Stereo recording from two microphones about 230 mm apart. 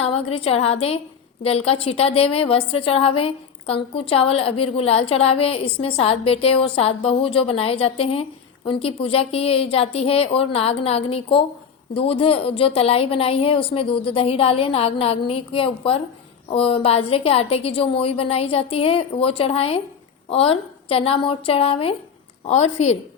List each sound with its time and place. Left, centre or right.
0.0 s a woman's voice: left